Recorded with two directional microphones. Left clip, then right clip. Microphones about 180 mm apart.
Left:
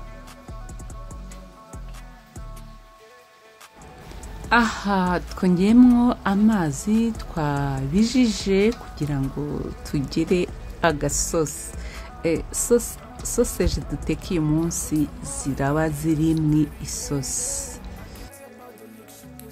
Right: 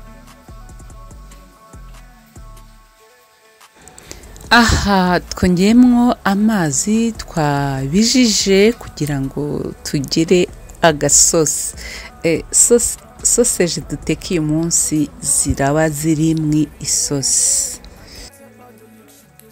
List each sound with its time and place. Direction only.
4.5 s speech: 25° right (ahead or behind)